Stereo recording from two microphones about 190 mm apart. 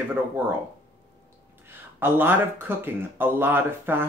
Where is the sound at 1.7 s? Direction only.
10° right (ahead or behind).